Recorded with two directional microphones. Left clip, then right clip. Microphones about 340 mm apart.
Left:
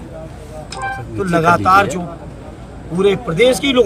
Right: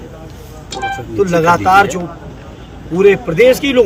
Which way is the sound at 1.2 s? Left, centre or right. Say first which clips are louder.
Right 2 dB; centre.